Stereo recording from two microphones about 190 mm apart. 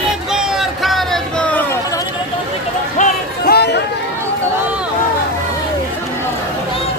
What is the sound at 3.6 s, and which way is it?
Chatter, 60° left (ahead or behind).